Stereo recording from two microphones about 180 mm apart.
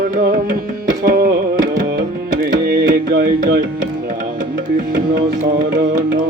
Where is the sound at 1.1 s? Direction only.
65° right (ahead or behind).